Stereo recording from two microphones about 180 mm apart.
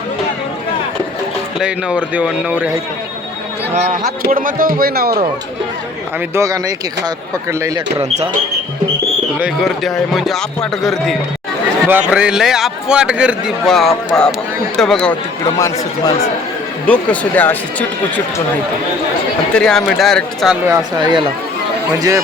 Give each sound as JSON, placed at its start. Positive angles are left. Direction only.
{"t": 1.5, "sound": "speech", "side_deg": -5}
{"t": 4.0, "sound": "speech", "side_deg": -50}
{"t": 6.3, "sound": "speech", "side_deg": -20}
{"t": 8.1, "sound": "speech", "side_deg": -40}
{"t": 9.4, "sound": "a man's voice", "side_deg": 0}
{"t": 15.4, "sound": "speech", "side_deg": 20}
{"t": 16.8, "sound": "speech", "side_deg": 10}
{"t": 19.5, "sound": "a man's voice", "side_deg": 5}
{"t": 20.7, "sound": "speech", "side_deg": -25}